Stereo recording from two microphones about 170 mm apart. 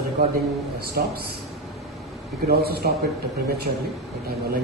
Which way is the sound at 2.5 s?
65° right (ahead or behind).